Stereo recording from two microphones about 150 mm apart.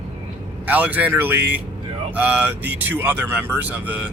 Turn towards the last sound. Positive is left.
turn(degrees=-10)  # may be behind; listen again after turning